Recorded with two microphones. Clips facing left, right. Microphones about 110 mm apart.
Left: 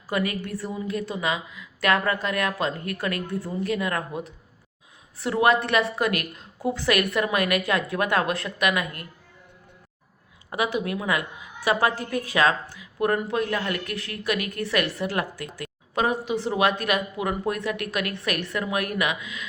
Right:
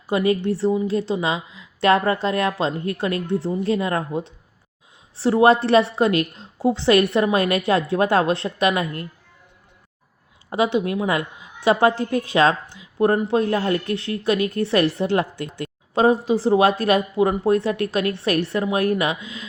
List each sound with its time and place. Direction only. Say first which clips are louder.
0.1 s a woman's voice: right 7 dB; 25° right (ahead or behind)
10.5 s a woman's voice: right 6 dB; 30° right (ahead or behind)